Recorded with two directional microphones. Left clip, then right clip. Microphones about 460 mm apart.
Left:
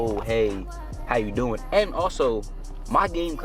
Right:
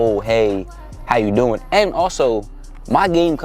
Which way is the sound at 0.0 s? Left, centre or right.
Right.